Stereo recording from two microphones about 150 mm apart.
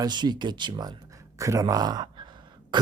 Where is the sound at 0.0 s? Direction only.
30° right (ahead or behind).